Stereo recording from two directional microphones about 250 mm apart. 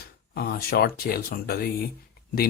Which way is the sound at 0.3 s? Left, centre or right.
Left.